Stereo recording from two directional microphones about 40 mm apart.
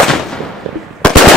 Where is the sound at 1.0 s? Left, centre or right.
Left.